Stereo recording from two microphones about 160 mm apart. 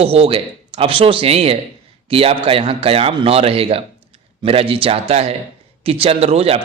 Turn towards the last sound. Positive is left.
turn(degrees=-40)  # may be behind; listen again after turning